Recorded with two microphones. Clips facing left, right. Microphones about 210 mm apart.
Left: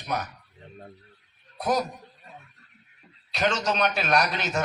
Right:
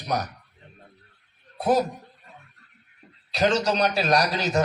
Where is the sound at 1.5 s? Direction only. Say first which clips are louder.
Right 4 dB; 30° right (ahead or behind).